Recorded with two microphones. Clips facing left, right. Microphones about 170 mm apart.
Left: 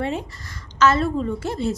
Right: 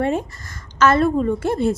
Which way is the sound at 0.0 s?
50° right (ahead or behind).